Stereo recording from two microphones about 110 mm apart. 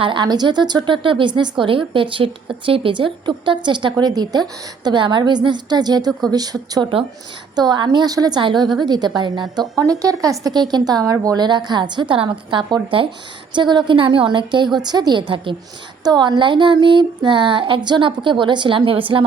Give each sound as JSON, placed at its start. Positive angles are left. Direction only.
{"t": 0.0, "sound": "a woman's voice", "side_deg": -45}